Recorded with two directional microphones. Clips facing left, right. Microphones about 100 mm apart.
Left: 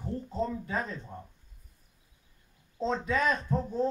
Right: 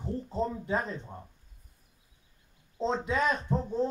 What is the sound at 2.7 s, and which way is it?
Speech, 20° right (ahead or behind).